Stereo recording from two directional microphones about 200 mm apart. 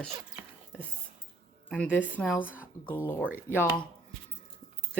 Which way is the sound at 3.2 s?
10° right (ahead or behind).